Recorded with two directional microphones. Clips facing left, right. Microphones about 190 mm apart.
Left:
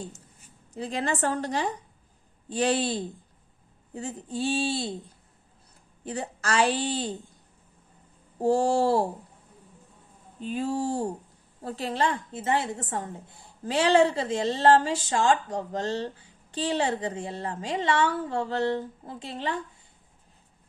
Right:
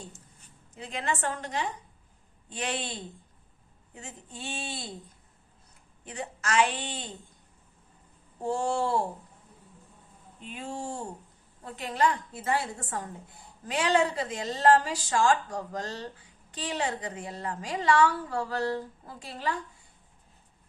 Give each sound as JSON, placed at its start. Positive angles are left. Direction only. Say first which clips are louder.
{"t": 0.7, "sound": "a woman's voice", "louder": "left 4 dB", "side_deg": 35}
{"t": 6.1, "sound": "a woman's voice", "louder": "left 3 dB", "side_deg": 35}
{"t": 8.4, "sound": "a woman's voice", "louder": "left 6 dB", "side_deg": 35}
{"t": 10.4, "sound": "a woman's voice", "louder": "left 9 dB", "side_deg": 35}